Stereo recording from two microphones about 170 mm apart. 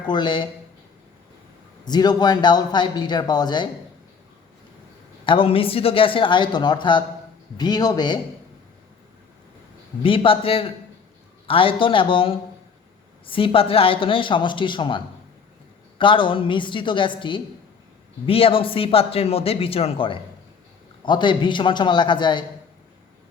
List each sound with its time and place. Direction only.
0.1 s speech: 25° left (ahead or behind)
1.8 s speech: 25° left (ahead or behind)
5.2 s a man's voice: 30° left (ahead or behind)
10.0 s a man's voice: 30° left (ahead or behind)